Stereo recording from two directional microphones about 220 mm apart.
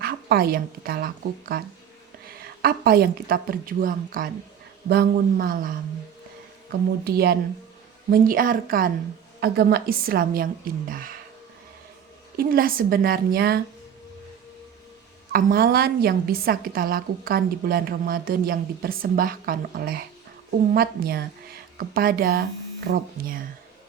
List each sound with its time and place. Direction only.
0.0 s a woman's voice: 45° right (ahead or behind)
12.4 s a woman's voice: 40° right (ahead or behind)
15.3 s a woman's voice: 40° right (ahead or behind)